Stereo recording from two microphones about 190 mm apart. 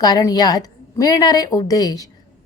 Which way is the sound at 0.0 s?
20° left (ahead or behind).